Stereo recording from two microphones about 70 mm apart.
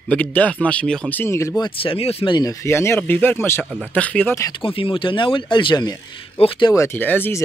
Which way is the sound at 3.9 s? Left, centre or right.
Left.